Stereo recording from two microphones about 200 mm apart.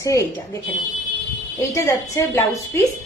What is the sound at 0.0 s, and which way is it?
Speech, 15° left (ahead or behind).